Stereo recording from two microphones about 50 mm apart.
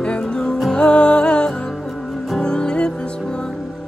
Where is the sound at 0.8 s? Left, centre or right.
Centre.